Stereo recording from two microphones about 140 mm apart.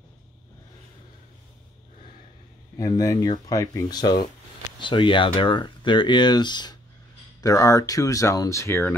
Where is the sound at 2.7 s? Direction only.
25° left (ahead or behind).